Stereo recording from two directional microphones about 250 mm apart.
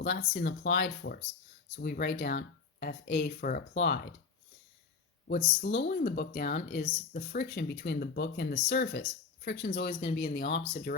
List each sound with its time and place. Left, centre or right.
0.0 s speech: left
5.3 s speech: left